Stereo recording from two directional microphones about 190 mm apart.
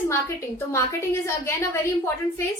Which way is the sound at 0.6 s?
15° left (ahead or behind).